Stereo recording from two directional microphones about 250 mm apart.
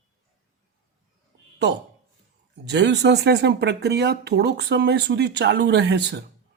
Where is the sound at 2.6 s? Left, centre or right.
Right.